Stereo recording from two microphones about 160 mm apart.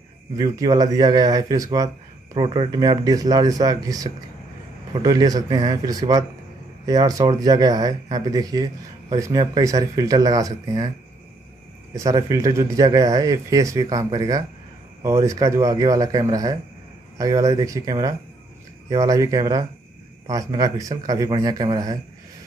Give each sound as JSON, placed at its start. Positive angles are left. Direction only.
{"t": 0.4, "sound": "speech", "side_deg": -25}
{"t": 11.9, "sound": "speech", "side_deg": -20}